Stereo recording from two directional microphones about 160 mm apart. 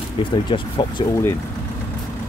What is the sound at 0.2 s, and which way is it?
Speech, 30° left (ahead or behind).